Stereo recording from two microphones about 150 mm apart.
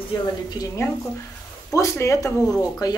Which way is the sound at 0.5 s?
20° left (ahead or behind).